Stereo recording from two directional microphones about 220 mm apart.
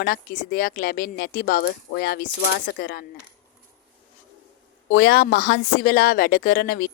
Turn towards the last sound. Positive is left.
turn(degrees=45)  # may be behind; listen again after turning